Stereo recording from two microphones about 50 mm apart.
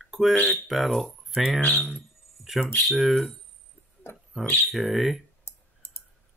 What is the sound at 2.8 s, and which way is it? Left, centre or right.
Speech, centre.